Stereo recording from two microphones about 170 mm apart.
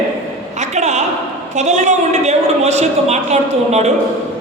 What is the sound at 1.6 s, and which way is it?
A woman's voice, 45° right (ahead or behind).